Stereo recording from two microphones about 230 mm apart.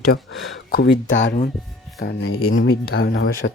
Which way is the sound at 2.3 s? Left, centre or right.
Left.